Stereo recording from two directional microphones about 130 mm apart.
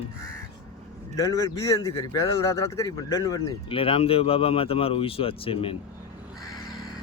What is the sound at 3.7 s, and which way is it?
Speech, 45° left (ahead or behind).